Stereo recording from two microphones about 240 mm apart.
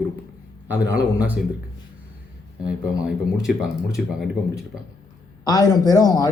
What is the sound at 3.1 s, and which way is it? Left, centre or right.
Speech, centre.